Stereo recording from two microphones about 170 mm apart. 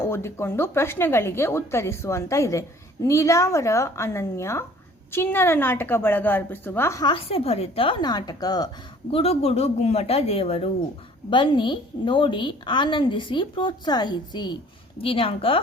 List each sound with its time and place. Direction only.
0.1 s a woman's voice: 15° left (ahead or behind)
9.1 s a woman's voice: 35° left (ahead or behind)